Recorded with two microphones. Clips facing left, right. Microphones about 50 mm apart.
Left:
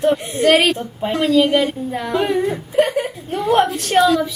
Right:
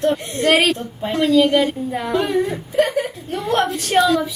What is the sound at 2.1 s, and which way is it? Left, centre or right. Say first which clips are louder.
Speech: left 1 dB; centre.